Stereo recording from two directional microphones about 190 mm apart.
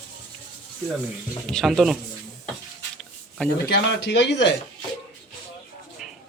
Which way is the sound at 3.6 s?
60° left (ahead or behind).